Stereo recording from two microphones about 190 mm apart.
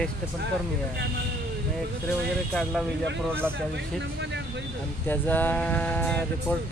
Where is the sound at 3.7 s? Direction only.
65° right (ahead or behind).